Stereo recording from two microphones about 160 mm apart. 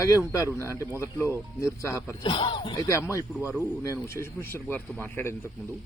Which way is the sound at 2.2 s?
30° left (ahead or behind).